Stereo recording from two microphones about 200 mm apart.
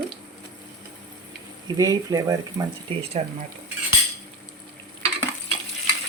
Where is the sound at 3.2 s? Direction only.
30° right (ahead or behind).